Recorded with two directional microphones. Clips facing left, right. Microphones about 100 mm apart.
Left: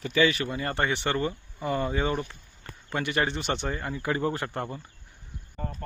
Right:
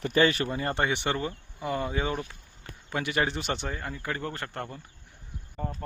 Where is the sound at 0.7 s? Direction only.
15° right (ahead or behind).